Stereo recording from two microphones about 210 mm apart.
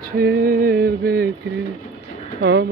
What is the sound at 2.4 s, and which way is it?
Speech, 55° right (ahead or behind).